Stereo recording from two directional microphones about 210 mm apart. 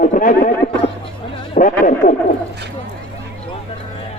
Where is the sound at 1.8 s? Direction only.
35° left (ahead or behind).